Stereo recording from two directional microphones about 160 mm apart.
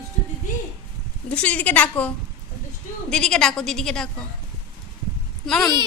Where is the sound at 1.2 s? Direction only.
10° left (ahead or behind).